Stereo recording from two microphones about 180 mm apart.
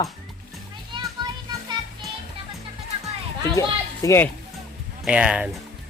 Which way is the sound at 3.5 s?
20° left (ahead or behind).